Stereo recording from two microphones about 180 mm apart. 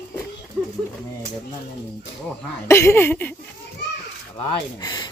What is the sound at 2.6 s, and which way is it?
Speech, 15° left (ahead or behind).